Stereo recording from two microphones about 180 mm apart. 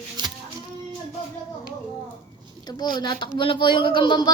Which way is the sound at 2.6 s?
25° left (ahead or behind).